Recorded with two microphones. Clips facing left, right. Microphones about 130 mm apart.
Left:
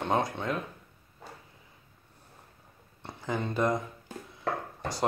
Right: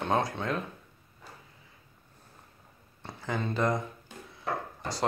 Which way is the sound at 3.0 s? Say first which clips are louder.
Left 1 dB; 15° left (ahead or behind).